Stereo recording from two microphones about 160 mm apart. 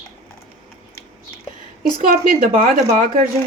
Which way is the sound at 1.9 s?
60° right (ahead or behind).